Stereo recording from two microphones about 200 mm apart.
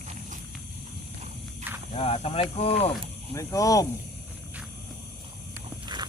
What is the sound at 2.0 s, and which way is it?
Speech, 30° left (ahead or behind).